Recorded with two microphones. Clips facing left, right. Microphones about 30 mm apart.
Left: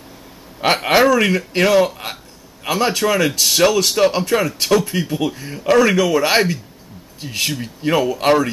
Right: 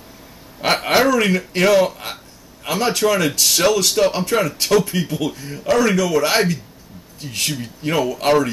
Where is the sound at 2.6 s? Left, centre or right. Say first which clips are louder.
Left 1 dB; left.